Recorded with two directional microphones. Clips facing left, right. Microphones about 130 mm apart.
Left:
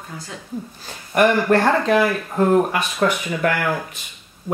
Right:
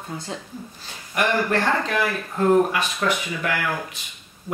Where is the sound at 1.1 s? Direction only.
45° left (ahead or behind).